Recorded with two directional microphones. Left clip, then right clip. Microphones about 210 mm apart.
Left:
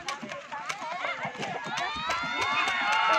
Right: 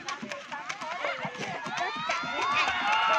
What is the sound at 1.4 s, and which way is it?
Run, 55° left (ahead or behind).